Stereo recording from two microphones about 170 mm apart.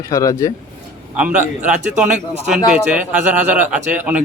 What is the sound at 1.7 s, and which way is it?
Speech, 45° right (ahead or behind).